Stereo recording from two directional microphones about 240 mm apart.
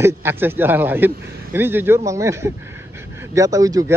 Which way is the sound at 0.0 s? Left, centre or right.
Centre.